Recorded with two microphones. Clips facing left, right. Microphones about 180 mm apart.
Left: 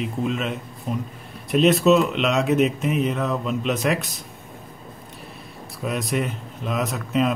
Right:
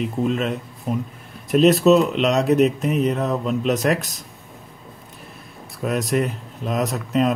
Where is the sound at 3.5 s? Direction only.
Centre (ahead or behind).